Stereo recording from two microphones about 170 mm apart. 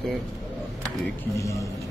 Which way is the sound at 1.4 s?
20° left (ahead or behind).